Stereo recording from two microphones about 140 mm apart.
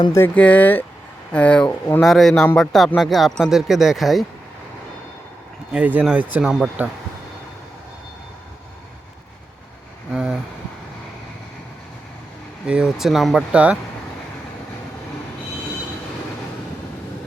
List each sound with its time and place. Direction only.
0.1 s speech: 15° left (ahead or behind)
5.7 s speech: 10° right (ahead or behind)
10.1 s speech: 5° right (ahead or behind)
12.6 s speech: 5° right (ahead or behind)